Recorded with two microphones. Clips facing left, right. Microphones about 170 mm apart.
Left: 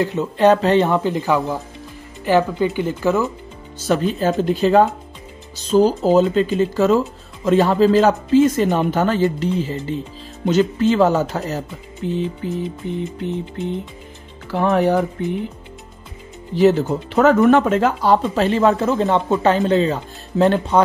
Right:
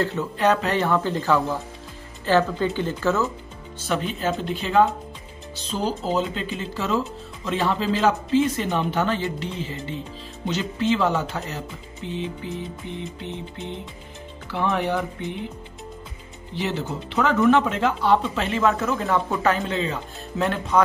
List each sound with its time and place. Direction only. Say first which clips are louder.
0.0 s speech: left 4 dB; 15° left (ahead or behind)
0.4 s speech: left 8 dB; 30° left (ahead or behind); by 3.3 s 15° left (ahead or behind)
3.8 s speech: left 7 dB; 40° left (ahead or behind)
14.5 s speech: left 7 dB; 40° left (ahead or behind)
16.5 s speech: left 12 dB; 45° left (ahead or behind)